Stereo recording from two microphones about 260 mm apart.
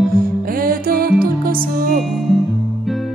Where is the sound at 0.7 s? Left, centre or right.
Right.